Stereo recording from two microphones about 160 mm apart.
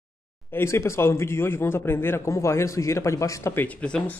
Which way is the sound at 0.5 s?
15° left (ahead or behind).